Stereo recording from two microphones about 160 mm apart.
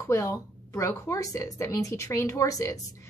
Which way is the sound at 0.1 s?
20° left (ahead or behind).